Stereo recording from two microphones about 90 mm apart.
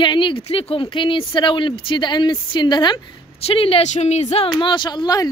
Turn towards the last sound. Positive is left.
turn(degrees=50)  # may be behind; listen again after turning